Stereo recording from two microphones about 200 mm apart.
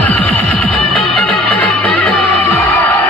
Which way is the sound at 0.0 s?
5° left (ahead or behind).